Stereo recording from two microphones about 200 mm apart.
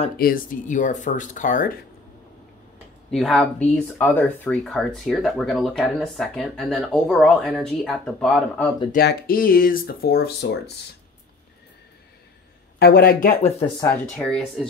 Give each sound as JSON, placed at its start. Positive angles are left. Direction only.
{"t": 0.2, "sound": "speech", "side_deg": 45}
{"t": 3.1, "sound": "speech", "side_deg": 0}
{"t": 8.9, "sound": "speech", "side_deg": 45}
{"t": 12.7, "sound": "speech", "side_deg": 50}
{"t": 14.1, "sound": "speech", "side_deg": 5}